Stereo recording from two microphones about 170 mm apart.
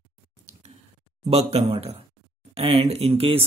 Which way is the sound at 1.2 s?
35° right (ahead or behind).